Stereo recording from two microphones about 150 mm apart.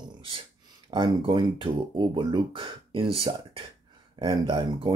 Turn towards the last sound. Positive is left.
turn(degrees=-35)  # may be behind; listen again after turning